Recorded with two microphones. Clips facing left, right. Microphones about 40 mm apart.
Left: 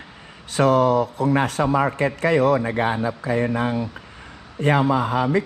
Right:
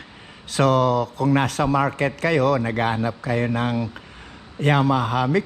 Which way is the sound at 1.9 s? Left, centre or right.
Right.